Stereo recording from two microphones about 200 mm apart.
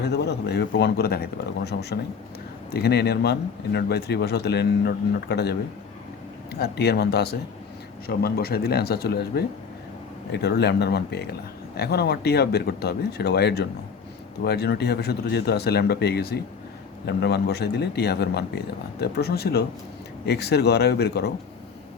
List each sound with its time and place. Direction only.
0.0 s speech: 55° left (ahead or behind)